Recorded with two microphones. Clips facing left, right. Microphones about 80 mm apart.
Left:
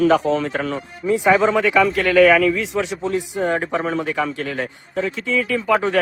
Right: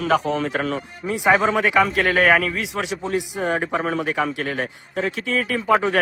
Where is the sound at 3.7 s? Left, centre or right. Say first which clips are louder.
Left 1 dB; right.